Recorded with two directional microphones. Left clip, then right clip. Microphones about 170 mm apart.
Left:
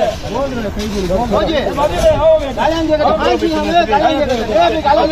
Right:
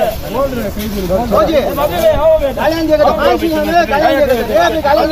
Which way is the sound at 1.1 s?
25° right (ahead or behind).